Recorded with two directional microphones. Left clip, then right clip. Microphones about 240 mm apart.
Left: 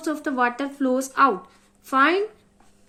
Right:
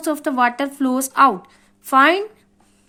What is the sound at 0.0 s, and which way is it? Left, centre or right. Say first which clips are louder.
A woman's voice: right 5 dB; right.